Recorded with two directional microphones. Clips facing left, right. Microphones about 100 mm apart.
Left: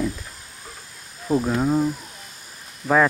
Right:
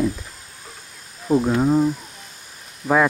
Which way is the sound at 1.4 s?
25° right (ahead or behind).